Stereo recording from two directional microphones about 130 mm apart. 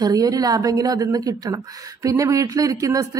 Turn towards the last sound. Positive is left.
turn(degrees=-25)  # may be behind; listen again after turning